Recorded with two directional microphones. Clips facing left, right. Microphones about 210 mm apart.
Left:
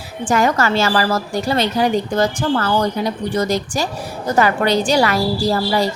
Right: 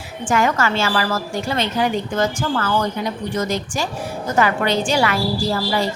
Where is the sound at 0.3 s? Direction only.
35° left (ahead or behind).